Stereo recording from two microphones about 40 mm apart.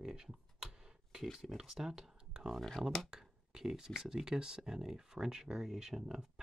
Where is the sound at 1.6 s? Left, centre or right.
Centre.